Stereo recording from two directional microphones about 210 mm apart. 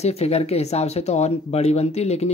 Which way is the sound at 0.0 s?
30° left (ahead or behind).